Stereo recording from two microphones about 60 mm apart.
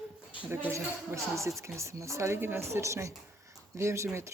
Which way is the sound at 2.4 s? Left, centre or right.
Right.